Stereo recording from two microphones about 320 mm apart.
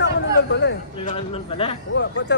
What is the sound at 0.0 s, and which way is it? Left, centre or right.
Speech, left.